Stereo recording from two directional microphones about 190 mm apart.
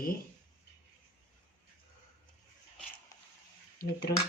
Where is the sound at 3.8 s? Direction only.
55° left (ahead or behind).